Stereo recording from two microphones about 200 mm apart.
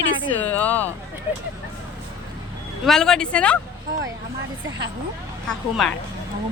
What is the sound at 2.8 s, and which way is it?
Speech, centre (ahead or behind).